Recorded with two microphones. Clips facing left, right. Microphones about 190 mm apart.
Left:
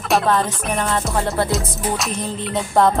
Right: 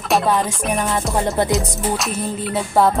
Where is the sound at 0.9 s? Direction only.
15° right (ahead or behind).